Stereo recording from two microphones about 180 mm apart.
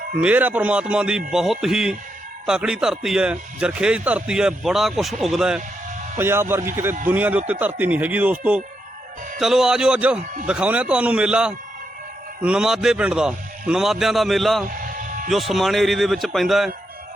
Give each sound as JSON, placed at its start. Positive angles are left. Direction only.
{"t": 0.2, "sound": "a man's voice", "side_deg": -10}
{"t": 14.7, "sound": "vehicle", "side_deg": -50}
{"t": 15.3, "sound": "a man's voice", "side_deg": 0}